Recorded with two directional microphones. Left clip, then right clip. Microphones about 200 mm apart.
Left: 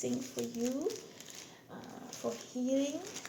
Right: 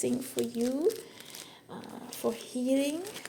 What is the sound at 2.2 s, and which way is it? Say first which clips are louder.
Speech: right 6 dB; 50° right (ahead or behind).